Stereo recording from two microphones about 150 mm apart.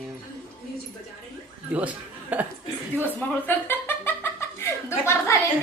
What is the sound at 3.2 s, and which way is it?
Chuckle, 10° left (ahead or behind).